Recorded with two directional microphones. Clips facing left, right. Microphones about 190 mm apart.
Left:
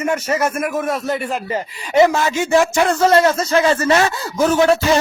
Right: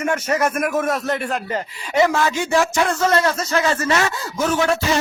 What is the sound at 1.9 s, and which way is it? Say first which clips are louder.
A man's voice: left 4 dB; 20° left (ahead or behind).